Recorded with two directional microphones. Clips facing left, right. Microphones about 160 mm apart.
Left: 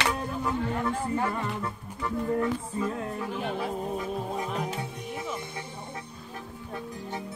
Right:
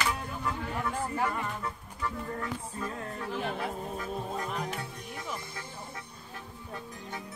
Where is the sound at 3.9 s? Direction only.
10° left (ahead or behind).